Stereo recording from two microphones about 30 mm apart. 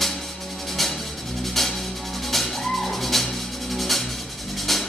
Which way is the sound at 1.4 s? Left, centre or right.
Centre.